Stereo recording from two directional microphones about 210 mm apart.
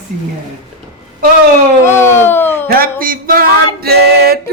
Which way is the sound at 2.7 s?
45° right (ahead or behind).